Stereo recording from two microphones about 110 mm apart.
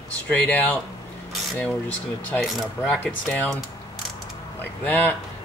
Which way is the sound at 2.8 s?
15° left (ahead or behind).